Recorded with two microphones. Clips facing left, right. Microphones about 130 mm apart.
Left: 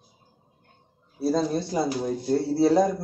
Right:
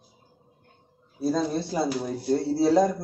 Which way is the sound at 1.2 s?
5° left (ahead or behind).